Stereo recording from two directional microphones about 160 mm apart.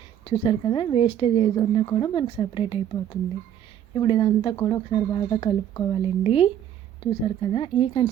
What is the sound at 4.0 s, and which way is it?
Speech, 30° left (ahead or behind).